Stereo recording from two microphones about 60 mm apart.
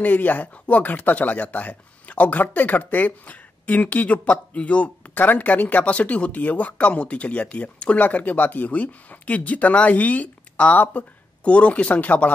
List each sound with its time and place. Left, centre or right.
0.0 s speech: left